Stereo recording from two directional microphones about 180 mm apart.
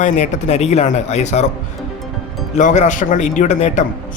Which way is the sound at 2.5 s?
45° left (ahead or behind).